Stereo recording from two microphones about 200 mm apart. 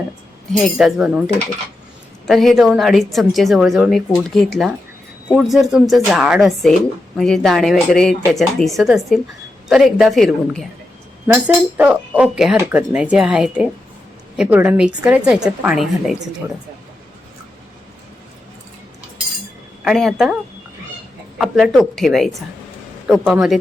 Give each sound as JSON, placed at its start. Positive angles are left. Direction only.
{"t": 0.5, "sound": "a woman's voice", "side_deg": 0}
{"t": 2.2, "sound": "a woman's voice", "side_deg": 0}
{"t": 11.3, "sound": "a woman's voice", "side_deg": -10}
{"t": 19.8, "sound": "a woman's voice", "side_deg": 0}